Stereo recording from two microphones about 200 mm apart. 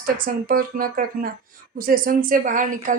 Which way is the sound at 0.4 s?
45° right (ahead or behind).